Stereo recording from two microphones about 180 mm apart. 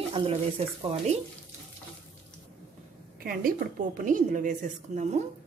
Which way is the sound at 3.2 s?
55° right (ahead or behind).